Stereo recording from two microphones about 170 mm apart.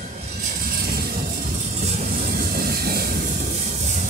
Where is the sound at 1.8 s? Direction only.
50° right (ahead or behind).